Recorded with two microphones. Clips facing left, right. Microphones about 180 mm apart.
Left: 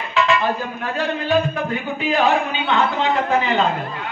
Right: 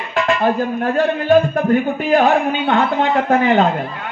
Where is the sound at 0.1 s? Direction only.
50° right (ahead or behind).